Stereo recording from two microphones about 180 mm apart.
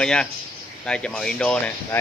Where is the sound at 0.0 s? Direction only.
5° left (ahead or behind).